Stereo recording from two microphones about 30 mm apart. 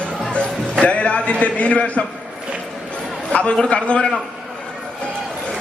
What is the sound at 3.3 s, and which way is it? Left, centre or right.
Speech, left.